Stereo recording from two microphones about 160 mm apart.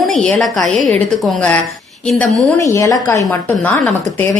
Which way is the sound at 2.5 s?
20° left (ahead or behind).